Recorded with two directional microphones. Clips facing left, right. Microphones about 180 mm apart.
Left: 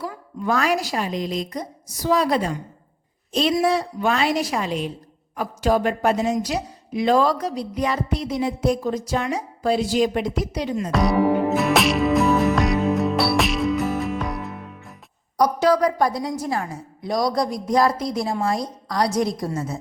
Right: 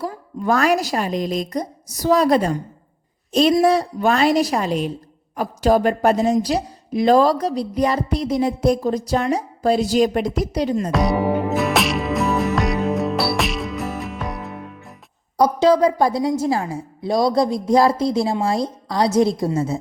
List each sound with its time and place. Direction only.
0.0 s a woman's voice: 40° right (ahead or behind)
10.9 s music: centre (ahead or behind)
15.4 s a woman's voice: 25° right (ahead or behind)